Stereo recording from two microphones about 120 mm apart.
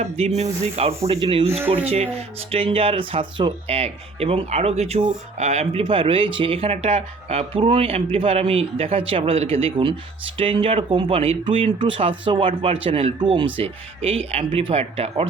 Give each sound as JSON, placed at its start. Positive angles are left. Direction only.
{"t": 0.0, "sound": "speech", "side_deg": -70}
{"t": 0.6, "sound": "speech", "side_deg": -60}
{"t": 3.7, "sound": "speech", "side_deg": -60}